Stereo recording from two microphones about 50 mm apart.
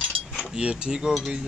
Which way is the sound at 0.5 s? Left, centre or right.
Centre.